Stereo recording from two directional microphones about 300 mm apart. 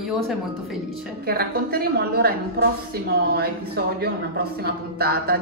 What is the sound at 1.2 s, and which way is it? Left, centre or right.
Speech, right.